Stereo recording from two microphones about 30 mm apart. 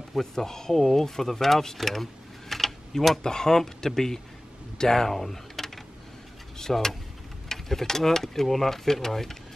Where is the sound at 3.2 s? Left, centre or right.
Centre.